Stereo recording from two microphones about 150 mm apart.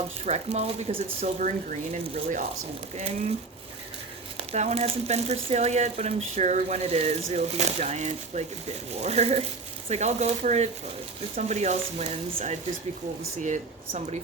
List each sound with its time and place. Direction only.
0.3 s speech: 45° right (ahead or behind)
1.4 s speech: 55° right (ahead or behind)
4.4 s speech: 45° right (ahead or behind)